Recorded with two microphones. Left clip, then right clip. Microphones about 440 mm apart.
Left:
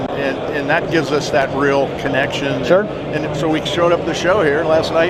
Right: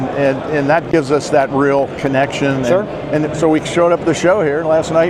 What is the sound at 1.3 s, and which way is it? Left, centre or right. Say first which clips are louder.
Speech: right 2 dB; right.